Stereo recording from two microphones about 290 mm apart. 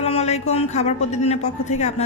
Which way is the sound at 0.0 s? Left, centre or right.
Left.